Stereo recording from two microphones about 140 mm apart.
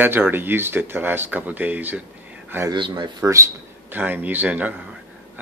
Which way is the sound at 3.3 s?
20° right (ahead or behind).